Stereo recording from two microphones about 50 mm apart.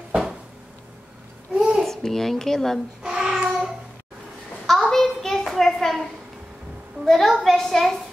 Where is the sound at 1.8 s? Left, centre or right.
Centre.